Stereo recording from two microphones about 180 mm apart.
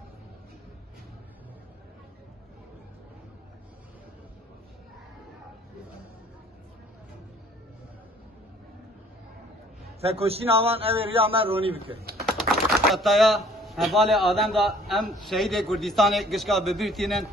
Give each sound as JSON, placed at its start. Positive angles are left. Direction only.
{"t": 9.9, "sound": "a man's voice", "side_deg": -35}
{"t": 12.3, "sound": "speech", "side_deg": 0}